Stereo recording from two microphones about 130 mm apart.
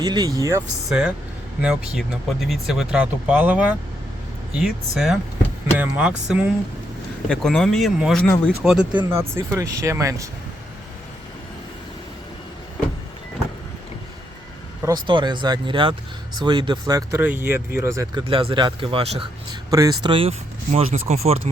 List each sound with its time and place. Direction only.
0.0 s speech: 30° right (ahead or behind)
0.9 s speech: 5° right (ahead or behind)
7.3 s speech: 5° left (ahead or behind)
8.2 s speech: 10° left (ahead or behind)
8.6 s speech: 5° right (ahead or behind); by 10.2 s 25° right (ahead or behind)
14.8 s speech: 35° right (ahead or behind)
17.2 s speech: 15° right (ahead or behind)
18.1 s speech: 40° right (ahead or behind)
19.7 s speech: 30° right (ahead or behind)
20.7 s speech: 55° right (ahead or behind)